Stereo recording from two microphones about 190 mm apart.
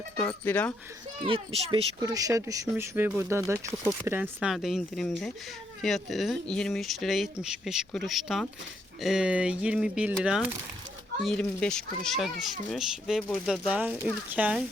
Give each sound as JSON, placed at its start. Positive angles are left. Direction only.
{"t": 0.2, "sound": "speech", "side_deg": 10}
{"t": 1.2, "sound": "a child's voice", "side_deg": -30}
{"t": 2.0, "sound": "speech", "side_deg": -20}